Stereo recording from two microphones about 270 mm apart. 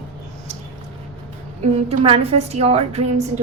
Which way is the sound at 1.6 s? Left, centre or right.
Right.